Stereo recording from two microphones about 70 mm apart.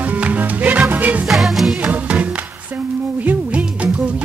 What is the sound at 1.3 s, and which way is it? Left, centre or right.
Music, centre.